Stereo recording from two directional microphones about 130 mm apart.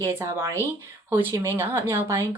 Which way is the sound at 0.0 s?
20° right (ahead or behind).